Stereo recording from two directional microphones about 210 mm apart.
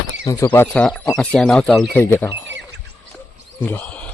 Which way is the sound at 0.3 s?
15° left (ahead or behind).